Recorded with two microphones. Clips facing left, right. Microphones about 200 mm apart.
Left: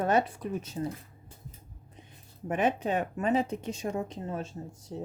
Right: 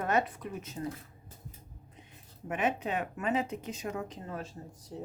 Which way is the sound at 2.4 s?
35° left (ahead or behind).